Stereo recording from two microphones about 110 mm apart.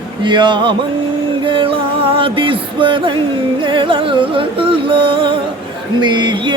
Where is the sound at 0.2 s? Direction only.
45° right (ahead or behind).